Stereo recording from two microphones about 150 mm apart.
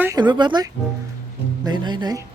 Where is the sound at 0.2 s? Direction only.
30° right (ahead or behind).